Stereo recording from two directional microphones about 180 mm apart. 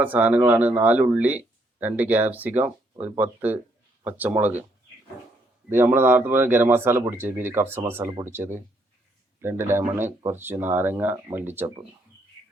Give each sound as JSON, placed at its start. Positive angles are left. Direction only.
{"t": 0.0, "sound": "speech", "side_deg": -10}
{"t": 5.6, "sound": "speech", "side_deg": -10}